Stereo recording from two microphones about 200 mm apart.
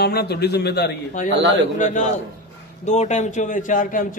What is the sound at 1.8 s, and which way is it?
A man's voice, 35° left (ahead or behind).